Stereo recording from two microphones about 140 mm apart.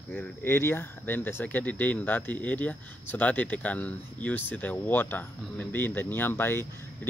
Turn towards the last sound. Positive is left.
turn(degrees=15)  # may be behind; listen again after turning